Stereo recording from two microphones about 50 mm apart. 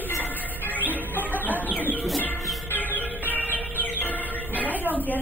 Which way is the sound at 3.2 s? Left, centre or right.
Left.